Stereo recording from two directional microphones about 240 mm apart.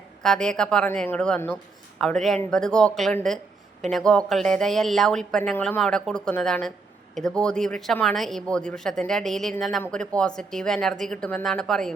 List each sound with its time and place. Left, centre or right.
0.2 s speech: centre